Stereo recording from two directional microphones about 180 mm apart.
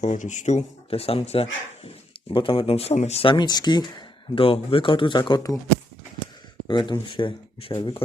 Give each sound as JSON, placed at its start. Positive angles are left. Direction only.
{"t": 0.0, "sound": "speech", "side_deg": 40}
{"t": 6.7, "sound": "speech", "side_deg": 25}